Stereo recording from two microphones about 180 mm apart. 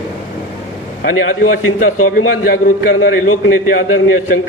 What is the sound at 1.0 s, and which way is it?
A man's voice, 55° left (ahead or behind).